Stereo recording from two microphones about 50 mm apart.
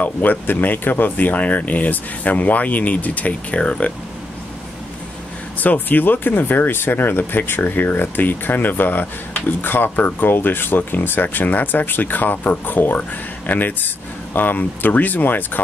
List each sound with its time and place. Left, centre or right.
0.0 s speech: left
5.6 s speech: left